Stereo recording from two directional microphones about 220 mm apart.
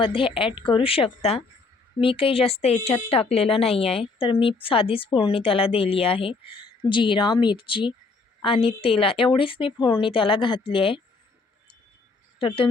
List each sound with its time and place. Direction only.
0.0 s speech: 25° left (ahead or behind)
12.4 s speech: 25° left (ahead or behind)